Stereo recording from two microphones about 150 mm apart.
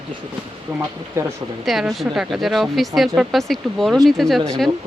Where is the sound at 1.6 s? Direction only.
Centre (ahead or behind).